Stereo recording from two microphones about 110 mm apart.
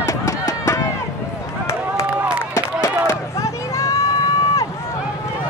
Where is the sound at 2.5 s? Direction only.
25° left (ahead or behind).